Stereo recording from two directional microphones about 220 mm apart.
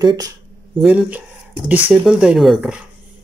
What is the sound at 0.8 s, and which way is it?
Speech, 5° right (ahead or behind).